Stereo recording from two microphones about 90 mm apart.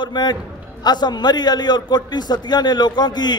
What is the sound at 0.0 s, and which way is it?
A man's voice, 55° left (ahead or behind).